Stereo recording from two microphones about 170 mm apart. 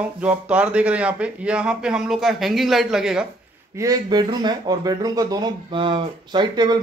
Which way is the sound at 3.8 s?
20° right (ahead or behind).